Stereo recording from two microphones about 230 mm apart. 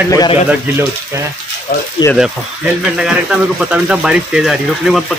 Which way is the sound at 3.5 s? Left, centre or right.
Centre.